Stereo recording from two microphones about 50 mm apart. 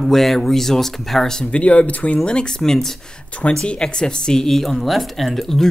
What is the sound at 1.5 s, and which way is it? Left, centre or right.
Speech, left.